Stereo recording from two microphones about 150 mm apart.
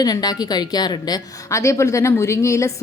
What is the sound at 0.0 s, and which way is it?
A woman's voice, 25° left (ahead or behind).